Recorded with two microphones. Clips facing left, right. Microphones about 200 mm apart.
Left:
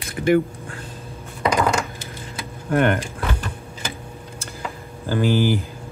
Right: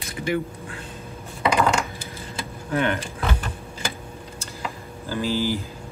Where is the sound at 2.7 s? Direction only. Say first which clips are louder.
Left 5 dB; 55° left (ahead or behind).